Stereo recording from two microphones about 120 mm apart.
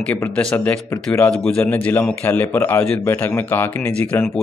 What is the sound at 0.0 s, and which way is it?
A man's voice, 10° left (ahead or behind).